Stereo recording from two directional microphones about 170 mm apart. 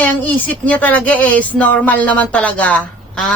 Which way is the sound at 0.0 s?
10° left (ahead or behind).